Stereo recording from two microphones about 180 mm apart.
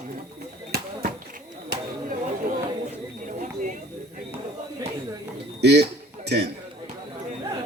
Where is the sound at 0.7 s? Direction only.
60° right (ahead or behind).